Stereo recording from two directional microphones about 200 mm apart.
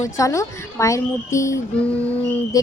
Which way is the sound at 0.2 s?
15° left (ahead or behind).